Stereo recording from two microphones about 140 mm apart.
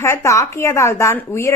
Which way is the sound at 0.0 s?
20° left (ahead or behind).